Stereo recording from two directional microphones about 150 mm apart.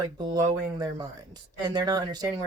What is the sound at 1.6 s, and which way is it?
Speech, 25° right (ahead or behind).